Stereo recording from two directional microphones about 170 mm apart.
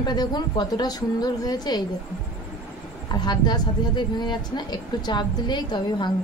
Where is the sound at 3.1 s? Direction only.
25° left (ahead or behind).